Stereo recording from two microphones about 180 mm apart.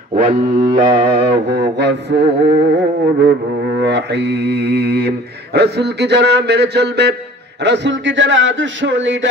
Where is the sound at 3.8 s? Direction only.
70° right (ahead or behind).